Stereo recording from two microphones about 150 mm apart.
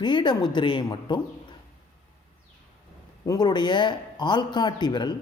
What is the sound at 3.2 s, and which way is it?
A man's voice, 25° left (ahead or behind).